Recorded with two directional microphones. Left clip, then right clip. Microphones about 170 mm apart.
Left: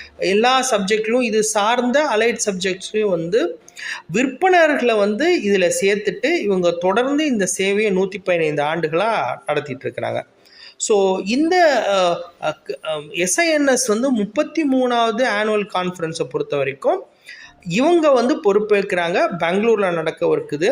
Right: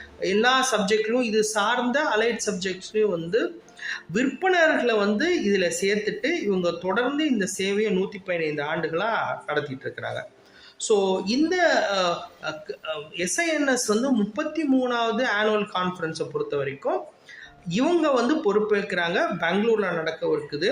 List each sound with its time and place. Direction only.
0.2 s speech: 30° left (ahead or behind)